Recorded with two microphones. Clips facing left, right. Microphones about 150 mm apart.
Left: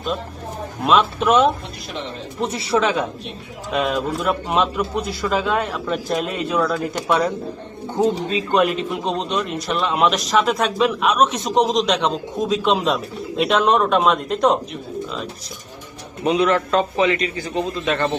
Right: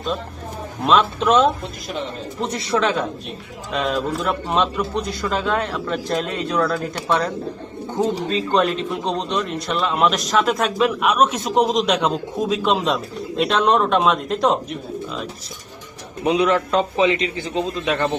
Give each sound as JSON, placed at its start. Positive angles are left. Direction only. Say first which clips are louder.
{"t": 0.8, "sound": "a man's voice", "louder": "even", "side_deg": 5}
{"t": 16.2, "sound": "a man's voice", "louder": "even", "side_deg": -15}